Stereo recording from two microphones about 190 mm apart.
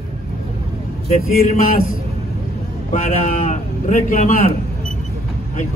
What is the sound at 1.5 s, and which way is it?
A man's voice, 45° left (ahead or behind).